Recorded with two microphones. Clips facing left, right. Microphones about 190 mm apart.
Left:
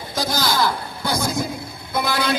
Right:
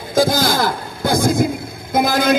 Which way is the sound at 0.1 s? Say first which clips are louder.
Right 8 dB; 50° right (ahead or behind).